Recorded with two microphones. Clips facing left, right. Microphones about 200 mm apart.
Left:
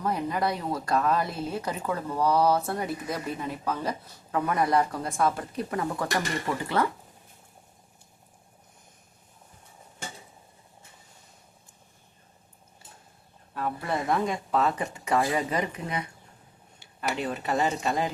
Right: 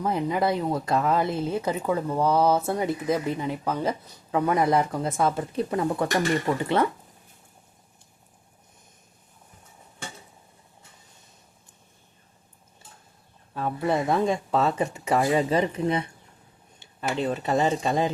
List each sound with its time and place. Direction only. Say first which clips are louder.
0.0 s speech: right 3 dB; 20° right (ahead or behind)
13.5 s speech: right 5 dB; 25° right (ahead or behind)